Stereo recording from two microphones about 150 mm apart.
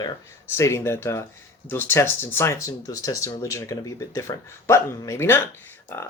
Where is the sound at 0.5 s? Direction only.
15° left (ahead or behind).